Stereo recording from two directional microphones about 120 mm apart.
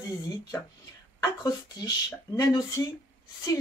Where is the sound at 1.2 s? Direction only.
30° left (ahead or behind).